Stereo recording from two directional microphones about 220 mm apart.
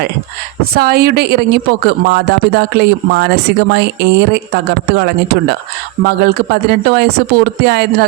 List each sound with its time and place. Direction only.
0.6 s speech: 45° right (ahead or behind)